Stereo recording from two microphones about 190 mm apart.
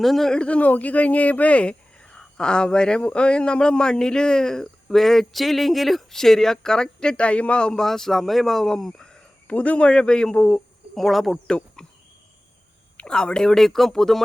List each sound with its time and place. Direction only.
0.0 s speech: centre (ahead or behind)
13.0 s speech: 5° left (ahead or behind)